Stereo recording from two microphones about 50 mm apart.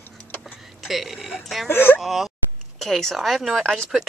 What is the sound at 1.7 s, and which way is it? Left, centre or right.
Speech, left.